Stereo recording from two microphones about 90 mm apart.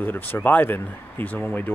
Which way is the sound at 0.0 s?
20° left (ahead or behind).